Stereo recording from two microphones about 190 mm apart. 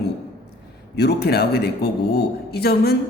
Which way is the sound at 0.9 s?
60° left (ahead or behind).